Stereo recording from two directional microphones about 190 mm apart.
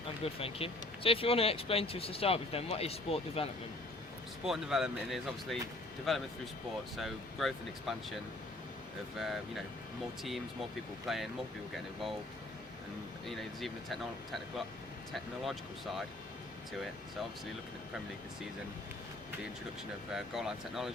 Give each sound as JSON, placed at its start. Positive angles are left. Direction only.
{"t": 0.3, "sound": "speech", "side_deg": 30}
{"t": 4.4, "sound": "speech", "side_deg": 0}
{"t": 11.0, "sound": "speech", "side_deg": 0}
{"t": 13.2, "sound": "speech", "side_deg": 0}
{"t": 20.1, "sound": "speech", "side_deg": 0}